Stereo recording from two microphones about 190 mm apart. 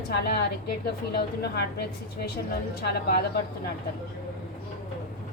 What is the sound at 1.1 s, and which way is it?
A woman's voice, 60° left (ahead or behind).